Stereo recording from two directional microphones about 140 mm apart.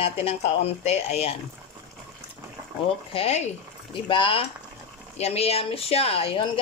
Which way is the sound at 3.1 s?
50° left (ahead or behind).